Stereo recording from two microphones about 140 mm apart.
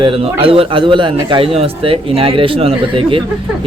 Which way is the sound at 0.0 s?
40° right (ahead or behind).